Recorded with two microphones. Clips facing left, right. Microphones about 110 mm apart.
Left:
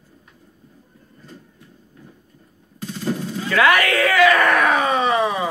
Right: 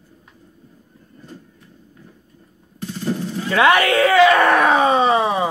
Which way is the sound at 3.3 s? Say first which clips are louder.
Right 2 dB; 25° right (ahead or behind).